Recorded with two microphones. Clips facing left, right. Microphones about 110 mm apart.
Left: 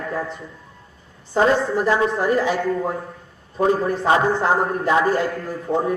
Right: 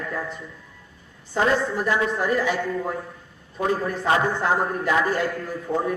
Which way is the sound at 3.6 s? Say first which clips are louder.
Left 4 dB; 30° left (ahead or behind).